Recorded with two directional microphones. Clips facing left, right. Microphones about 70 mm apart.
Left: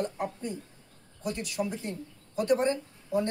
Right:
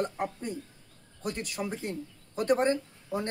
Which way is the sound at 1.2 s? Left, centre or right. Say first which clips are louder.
Left 2 dB; right.